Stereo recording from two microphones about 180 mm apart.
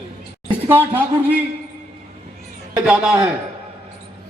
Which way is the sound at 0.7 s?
10° right (ahead or behind).